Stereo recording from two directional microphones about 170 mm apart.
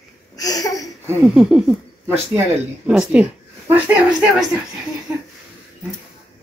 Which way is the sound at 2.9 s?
5° right (ahead or behind).